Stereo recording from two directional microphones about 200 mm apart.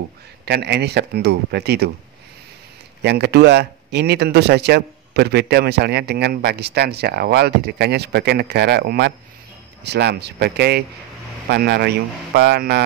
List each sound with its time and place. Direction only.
0.5 s speech: 55° right (ahead or behind)
3.0 s speech: 55° right (ahead or behind)